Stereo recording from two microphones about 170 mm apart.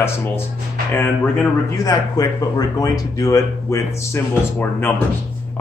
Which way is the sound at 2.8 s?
20° left (ahead or behind).